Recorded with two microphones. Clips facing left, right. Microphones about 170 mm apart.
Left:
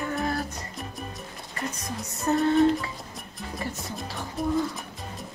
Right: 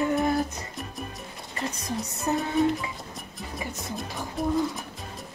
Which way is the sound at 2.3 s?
15° right (ahead or behind).